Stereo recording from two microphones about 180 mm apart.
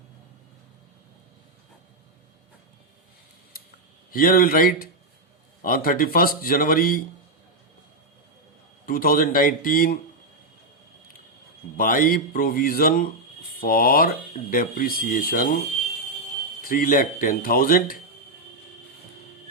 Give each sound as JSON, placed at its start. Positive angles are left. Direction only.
{"t": 4.1, "sound": "speech", "side_deg": 50}
{"t": 8.9, "sound": "speech", "side_deg": 55}
{"t": 11.8, "sound": "speech", "side_deg": 50}